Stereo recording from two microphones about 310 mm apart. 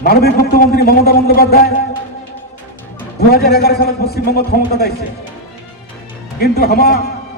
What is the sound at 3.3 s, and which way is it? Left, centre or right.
A man's voice, left.